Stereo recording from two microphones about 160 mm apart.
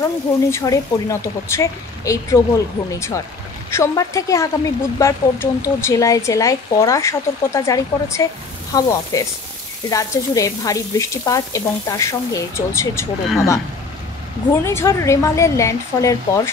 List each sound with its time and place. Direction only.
0.0 s a woman's voice: 20° left (ahead or behind)
14.5 s a woman's voice: 15° left (ahead or behind)